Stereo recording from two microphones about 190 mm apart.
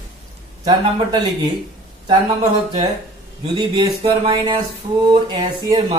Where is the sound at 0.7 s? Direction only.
25° right (ahead or behind).